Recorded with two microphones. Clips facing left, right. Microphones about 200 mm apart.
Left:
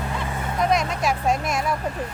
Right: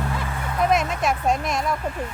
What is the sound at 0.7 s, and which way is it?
Speech, 5° right (ahead or behind).